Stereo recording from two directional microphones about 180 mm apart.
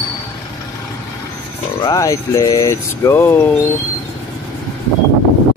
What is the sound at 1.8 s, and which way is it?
Speech, 20° left (ahead or behind).